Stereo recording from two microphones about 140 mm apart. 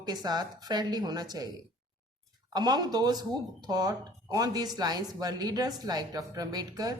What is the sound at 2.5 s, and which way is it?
Speech, 30° right (ahead or behind).